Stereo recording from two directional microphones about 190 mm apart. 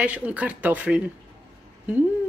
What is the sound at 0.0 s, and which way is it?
Speech, 5° right (ahead or behind).